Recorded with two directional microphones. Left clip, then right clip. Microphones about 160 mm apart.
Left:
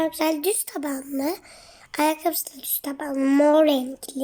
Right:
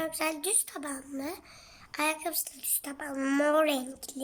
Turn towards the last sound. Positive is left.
turn(degrees=35)  # may be behind; listen again after turning